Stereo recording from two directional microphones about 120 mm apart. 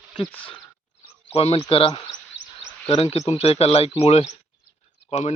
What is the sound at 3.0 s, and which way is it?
Speech, 60° left (ahead or behind).